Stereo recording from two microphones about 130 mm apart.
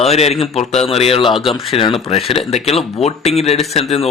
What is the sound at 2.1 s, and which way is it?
A man's voice, 50° left (ahead or behind).